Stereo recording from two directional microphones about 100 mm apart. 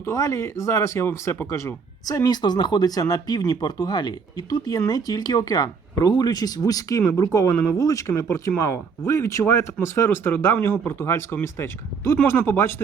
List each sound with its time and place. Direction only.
0.0 s speech: 30° left (ahead or behind)
7.5 s speech: 20° left (ahead or behind)
7.8 s speech: 35° left (ahead or behind)